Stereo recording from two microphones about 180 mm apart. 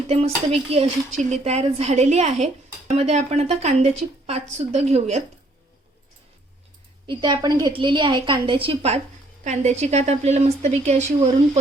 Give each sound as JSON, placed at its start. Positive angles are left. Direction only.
{"t": 0.1, "sound": "speech", "side_deg": -35}
{"t": 7.1, "sound": "a woman's voice", "side_deg": -25}